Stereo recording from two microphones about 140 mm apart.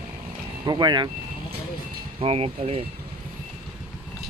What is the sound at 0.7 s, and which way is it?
Speech, 30° right (ahead or behind).